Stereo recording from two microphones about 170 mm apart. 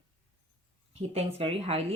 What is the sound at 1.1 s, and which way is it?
Speech, 35° right (ahead or behind).